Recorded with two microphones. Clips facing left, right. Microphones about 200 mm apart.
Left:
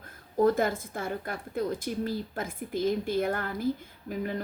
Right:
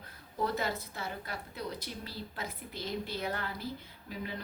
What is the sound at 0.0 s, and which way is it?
Speech, 50° left (ahead or behind).